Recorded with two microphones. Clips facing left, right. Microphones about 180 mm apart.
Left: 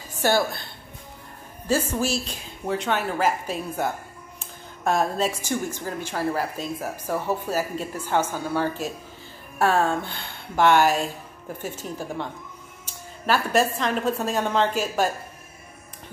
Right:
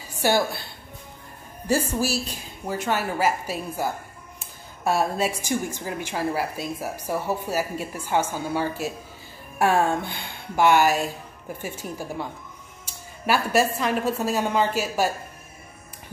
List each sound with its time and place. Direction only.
0.1 s music: 15° right (ahead or behind)
1.7 s a woman's voice: 10° right (ahead or behind)
13.3 s a woman's voice: 10° right (ahead or behind)